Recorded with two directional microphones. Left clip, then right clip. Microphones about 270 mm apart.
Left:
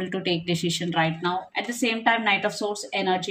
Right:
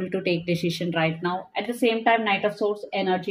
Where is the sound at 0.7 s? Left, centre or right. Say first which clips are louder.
Even; centre.